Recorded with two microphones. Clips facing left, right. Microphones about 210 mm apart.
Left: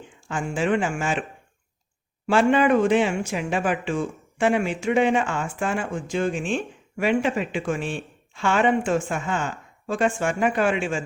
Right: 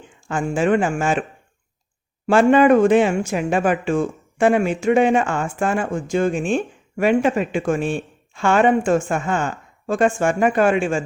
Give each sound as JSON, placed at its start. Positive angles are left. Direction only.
{"t": 0.3, "sound": "speech", "side_deg": -50}
{"t": 2.2, "sound": "speech", "side_deg": -50}